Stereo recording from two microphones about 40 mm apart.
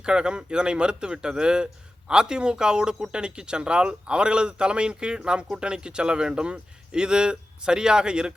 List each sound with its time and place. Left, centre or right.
0.0 s a man's voice: right